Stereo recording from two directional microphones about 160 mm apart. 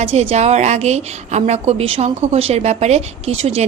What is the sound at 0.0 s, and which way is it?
A woman's voice, 40° right (ahead or behind).